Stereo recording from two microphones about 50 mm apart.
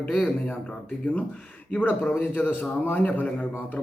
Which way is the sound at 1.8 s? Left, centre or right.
Left.